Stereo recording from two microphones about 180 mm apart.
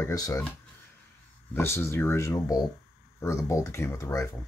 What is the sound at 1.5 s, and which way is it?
Speech, 15° left (ahead or behind).